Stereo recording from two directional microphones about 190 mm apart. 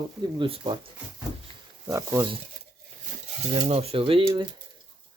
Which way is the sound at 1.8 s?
15° right (ahead or behind).